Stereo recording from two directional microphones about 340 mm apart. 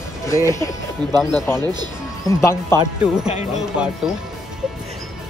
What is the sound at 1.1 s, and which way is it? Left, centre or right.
Speech, centre.